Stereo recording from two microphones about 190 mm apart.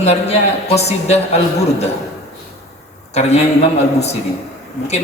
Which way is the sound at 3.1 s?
35° left (ahead or behind).